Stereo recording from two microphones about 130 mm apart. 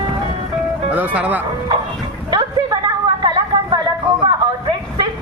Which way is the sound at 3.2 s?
35° right (ahead or behind).